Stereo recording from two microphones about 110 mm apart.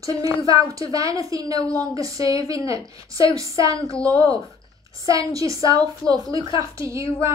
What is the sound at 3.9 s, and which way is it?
Speech, 10° left (ahead or behind).